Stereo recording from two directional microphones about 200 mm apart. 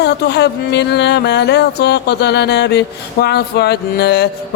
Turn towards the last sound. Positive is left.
turn(degrees=55)  # may be behind; listen again after turning